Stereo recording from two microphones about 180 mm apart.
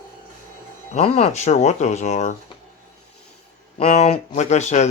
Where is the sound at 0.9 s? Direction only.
35° left (ahead or behind).